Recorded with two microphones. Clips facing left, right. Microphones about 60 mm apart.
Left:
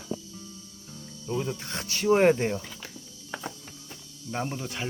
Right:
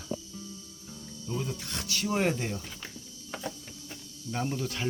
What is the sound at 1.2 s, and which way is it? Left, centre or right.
Speech, left.